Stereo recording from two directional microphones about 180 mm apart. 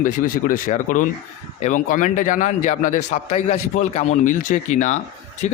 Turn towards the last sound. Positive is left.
turn(degrees=40)  # may be behind; listen again after turning